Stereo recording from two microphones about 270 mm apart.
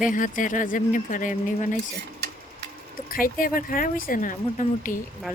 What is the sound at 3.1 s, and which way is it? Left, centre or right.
Speech, left.